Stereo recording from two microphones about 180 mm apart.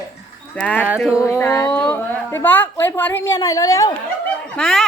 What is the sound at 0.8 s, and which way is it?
Speech, 5° right (ahead or behind).